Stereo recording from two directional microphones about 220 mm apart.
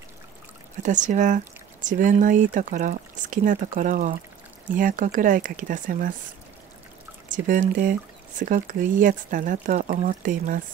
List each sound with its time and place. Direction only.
0.8 s speech: 35° right (ahead or behind)
7.4 s speech: 35° right (ahead or behind)